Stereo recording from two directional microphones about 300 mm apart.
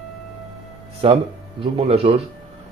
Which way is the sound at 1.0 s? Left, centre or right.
Centre.